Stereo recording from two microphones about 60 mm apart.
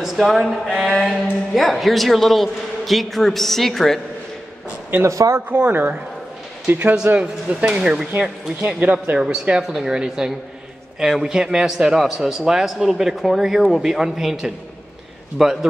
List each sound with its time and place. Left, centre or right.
0.0 s a man's voice: centre
5.0 s speech: right
5.7 s speech: right
7.2 s a man's voice: centre